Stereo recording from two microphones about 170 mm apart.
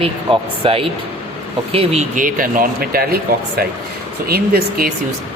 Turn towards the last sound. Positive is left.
turn(degrees=-60)  # may be behind; listen again after turning